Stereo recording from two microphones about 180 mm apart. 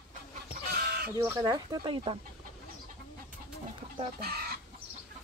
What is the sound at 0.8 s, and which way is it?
Fowl, 60° right (ahead or behind).